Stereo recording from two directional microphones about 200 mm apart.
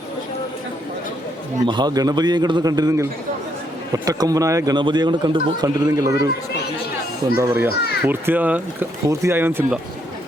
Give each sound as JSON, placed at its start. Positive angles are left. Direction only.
{"t": 1.6, "sound": "a man's voice", "side_deg": -20}
{"t": 7.3, "sound": "a man's voice", "side_deg": -10}